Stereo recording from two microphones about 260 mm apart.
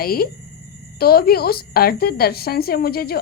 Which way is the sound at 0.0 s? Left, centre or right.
Left.